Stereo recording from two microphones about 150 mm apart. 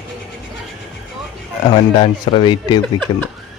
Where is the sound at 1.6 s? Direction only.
35° left (ahead or behind).